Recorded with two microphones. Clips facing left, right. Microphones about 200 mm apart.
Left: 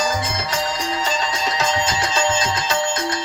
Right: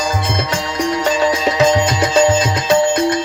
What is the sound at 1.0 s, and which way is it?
Music, 60° right (ahead or behind).